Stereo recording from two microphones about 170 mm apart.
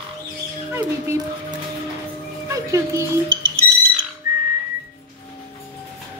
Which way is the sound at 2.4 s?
20° right (ahead or behind).